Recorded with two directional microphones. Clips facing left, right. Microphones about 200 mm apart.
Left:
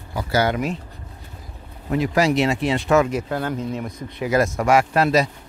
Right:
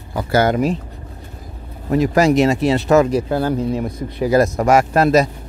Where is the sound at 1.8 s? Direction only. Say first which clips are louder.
Right 5 dB; 40° right (ahead or behind).